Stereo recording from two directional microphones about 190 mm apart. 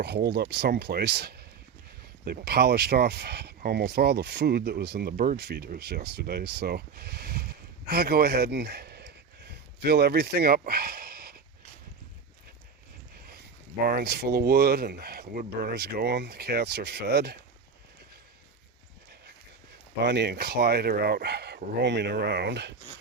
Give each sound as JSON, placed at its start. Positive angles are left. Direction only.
{"t": 0.0, "sound": "speech", "side_deg": -60}
{"t": 13.1, "sound": "a sound", "side_deg": -55}
{"t": 13.8, "sound": "speech", "side_deg": -55}
{"t": 20.1, "sound": "speech", "side_deg": -60}